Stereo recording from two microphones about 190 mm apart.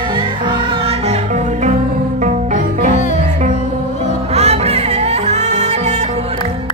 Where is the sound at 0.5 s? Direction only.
35° right (ahead or behind).